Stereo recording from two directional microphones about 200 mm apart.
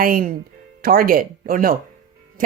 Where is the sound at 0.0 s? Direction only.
45° right (ahead or behind).